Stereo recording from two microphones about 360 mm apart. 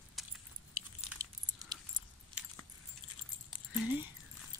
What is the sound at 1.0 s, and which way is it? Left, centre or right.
Keys jangling, centre.